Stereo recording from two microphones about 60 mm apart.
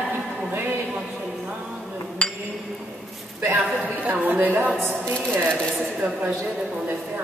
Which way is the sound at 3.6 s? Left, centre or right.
Right.